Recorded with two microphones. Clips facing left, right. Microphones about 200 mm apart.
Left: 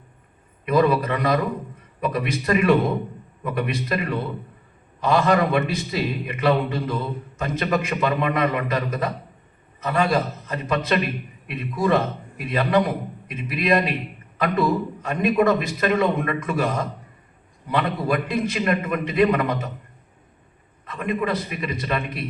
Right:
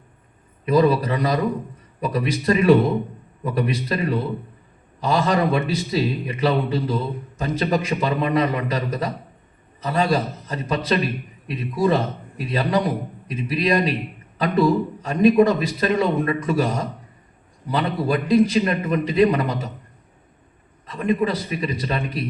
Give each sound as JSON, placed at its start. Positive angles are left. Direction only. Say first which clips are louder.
{"t": 0.6, "sound": "a man's voice", "louder": "right 2 dB", "side_deg": -35}
{"t": 20.8, "sound": "a man's voice", "louder": "right 4 dB", "side_deg": -30}